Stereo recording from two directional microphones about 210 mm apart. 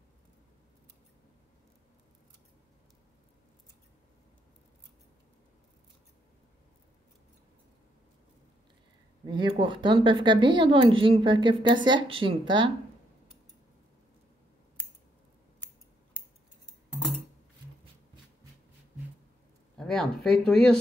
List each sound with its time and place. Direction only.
9.2 s speech: 20° right (ahead or behind)
19.8 s speech: 5° left (ahead or behind)